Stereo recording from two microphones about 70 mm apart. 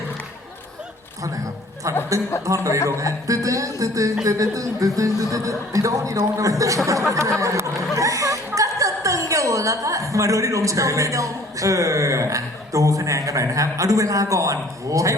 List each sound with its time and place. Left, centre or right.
2.1 s speech: right
2.7 s speech: left
3.0 s speech: right
4.2 s a sound: right
7.1 s speech: right